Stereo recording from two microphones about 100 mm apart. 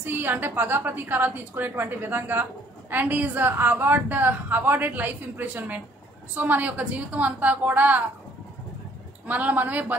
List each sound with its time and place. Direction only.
0.0 s a woman's voice: 20° right (ahead or behind)
9.3 s a woman's voice: 15° right (ahead or behind)